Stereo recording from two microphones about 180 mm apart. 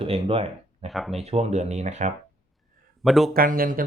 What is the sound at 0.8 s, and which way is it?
Speech, centre (ahead or behind).